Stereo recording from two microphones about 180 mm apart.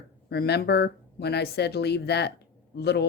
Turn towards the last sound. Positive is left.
turn(degrees=65)  # may be behind; listen again after turning